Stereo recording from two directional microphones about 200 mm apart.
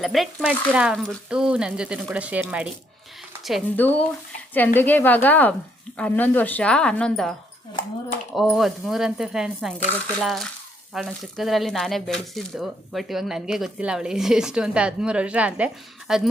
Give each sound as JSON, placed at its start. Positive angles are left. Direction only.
{"t": 0.0, "sound": "speech", "side_deg": 0}
{"t": 4.5, "sound": "a woman's voice", "side_deg": 10}
{"t": 8.4, "sound": "speech", "side_deg": 0}